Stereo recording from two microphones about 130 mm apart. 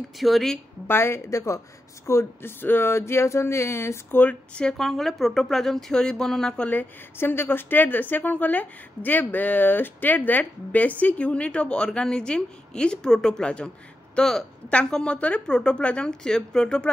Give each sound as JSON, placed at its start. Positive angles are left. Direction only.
{"t": 0.2, "sound": "speech", "side_deg": 0}
{"t": 0.8, "sound": "a woman's voice", "side_deg": 20}
{"t": 2.0, "sound": "a sound", "side_deg": 20}